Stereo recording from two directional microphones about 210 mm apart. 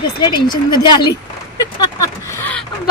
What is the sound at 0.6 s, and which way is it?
Speech, 20° left (ahead or behind).